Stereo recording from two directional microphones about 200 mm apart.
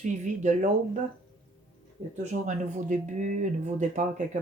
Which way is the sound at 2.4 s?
35° right (ahead or behind).